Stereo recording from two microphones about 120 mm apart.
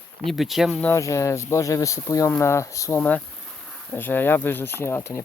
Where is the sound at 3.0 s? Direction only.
10° left (ahead or behind).